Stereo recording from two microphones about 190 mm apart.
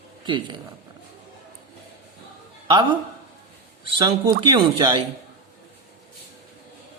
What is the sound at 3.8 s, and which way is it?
Speech, 25° right (ahead or behind).